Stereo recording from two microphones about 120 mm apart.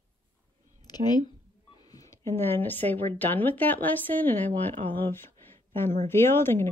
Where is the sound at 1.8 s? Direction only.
30° left (ahead or behind).